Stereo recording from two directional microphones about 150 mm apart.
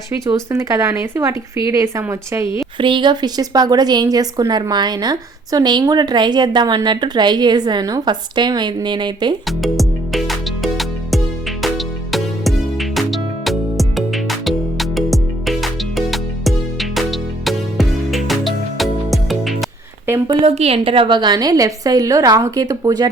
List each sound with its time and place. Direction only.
0.1 s a woman's voice: 20° right (ahead or behind)
2.7 s a woman's voice: 35° right (ahead or behind)
9.6 s music: centre (ahead or behind)
20.4 s a woman's voice: 40° right (ahead or behind); by 23.0 s 25° right (ahead or behind)